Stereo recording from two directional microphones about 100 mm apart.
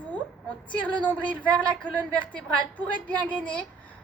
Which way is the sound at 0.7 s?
15° left (ahead or behind).